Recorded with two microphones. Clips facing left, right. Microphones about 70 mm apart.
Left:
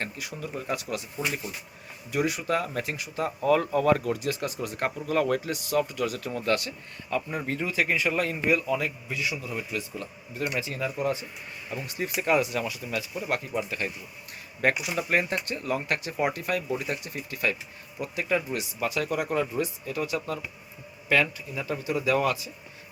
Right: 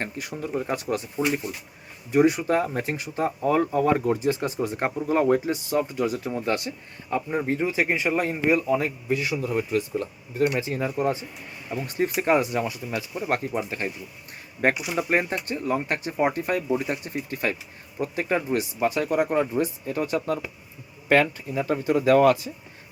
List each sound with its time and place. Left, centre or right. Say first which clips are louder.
0.2 s speech: right 6 dB; right
1.1 s speech: right 6 dB; right